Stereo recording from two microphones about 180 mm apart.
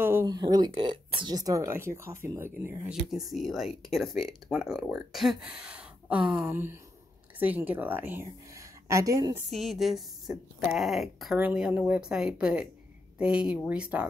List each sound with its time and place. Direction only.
0.0 s speech: 15° right (ahead or behind)
3.1 s a woman's voice: centre (ahead or behind); by 9.3 s 20° right (ahead or behind)
9.5 s speech: centre (ahead or behind)